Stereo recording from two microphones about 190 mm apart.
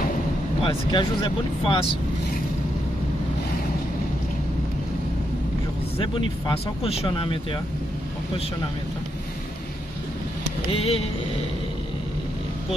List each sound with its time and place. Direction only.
0.6 s speech: 25° left (ahead or behind)
5.9 s speech: 30° left (ahead or behind)
10.7 s speech: 30° left (ahead or behind)